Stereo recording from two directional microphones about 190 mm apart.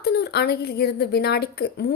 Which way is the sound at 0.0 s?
60° left (ahead or behind).